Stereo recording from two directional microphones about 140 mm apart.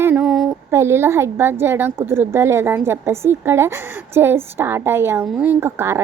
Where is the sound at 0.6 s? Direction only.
20° right (ahead or behind).